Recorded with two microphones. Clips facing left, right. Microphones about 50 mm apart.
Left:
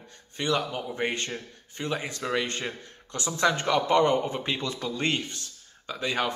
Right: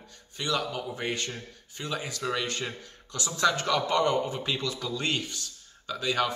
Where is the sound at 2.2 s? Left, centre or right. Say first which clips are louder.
Even; centre.